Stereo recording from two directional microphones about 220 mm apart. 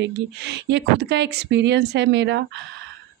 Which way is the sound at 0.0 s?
50° right (ahead or behind).